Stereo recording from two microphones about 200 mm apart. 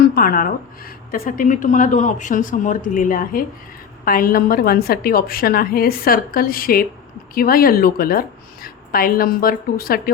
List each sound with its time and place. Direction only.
0.0 s a woman's voice: 50° left (ahead or behind)